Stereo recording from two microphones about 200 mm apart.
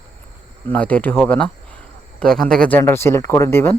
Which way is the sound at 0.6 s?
10° left (ahead or behind).